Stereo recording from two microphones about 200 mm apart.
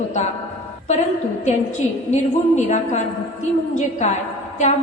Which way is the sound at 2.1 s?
35° left (ahead or behind).